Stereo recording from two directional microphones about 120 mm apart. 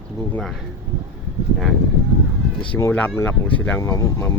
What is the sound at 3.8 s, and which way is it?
Speech, 25° left (ahead or behind).